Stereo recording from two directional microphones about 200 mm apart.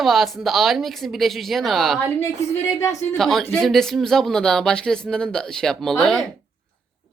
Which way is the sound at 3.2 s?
Centre (ahead or behind).